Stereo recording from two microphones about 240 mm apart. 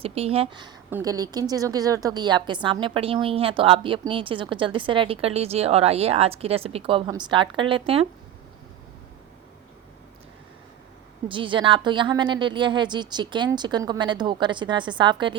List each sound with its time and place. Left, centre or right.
0.0 s a woman's voice: right
11.3 s a woman's voice: right